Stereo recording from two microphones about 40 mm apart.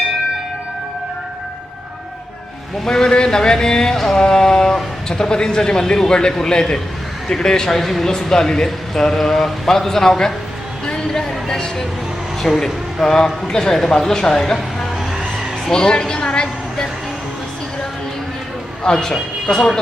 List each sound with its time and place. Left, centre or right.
2.8 s a man's voice: centre
7.8 s speech: centre
8.2 s speech: centre
10.8 s a sound: centre
11.4 s speech: centre
15.7 s a woman's voice: left
18.8 s a man's voice: centre